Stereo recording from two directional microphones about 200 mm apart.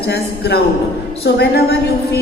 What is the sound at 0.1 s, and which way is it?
Music, 55° left (ahead or behind).